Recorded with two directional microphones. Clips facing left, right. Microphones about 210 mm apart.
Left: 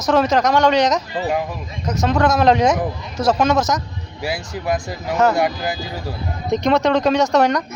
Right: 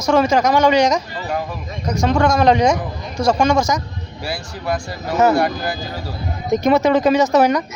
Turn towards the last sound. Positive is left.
turn(degrees=0)  # may be behind; listen again after turning